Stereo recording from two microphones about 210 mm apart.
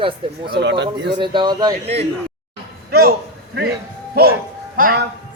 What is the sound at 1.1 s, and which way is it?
Speech, 20° right (ahead or behind).